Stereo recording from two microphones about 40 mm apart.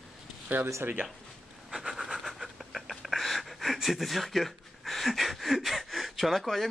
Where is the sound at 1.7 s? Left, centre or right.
Centre.